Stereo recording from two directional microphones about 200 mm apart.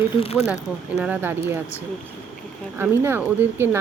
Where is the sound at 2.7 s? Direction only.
10° right (ahead or behind).